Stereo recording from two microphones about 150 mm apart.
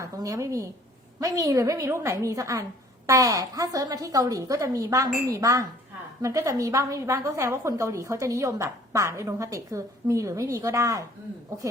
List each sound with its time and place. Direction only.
0.0 s a woman's voice: 20° right (ahead or behind)